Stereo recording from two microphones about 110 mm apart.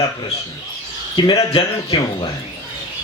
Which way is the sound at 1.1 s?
35° left (ahead or behind).